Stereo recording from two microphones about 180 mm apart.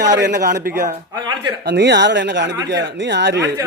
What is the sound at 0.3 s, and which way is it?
Speech, 55° right (ahead or behind).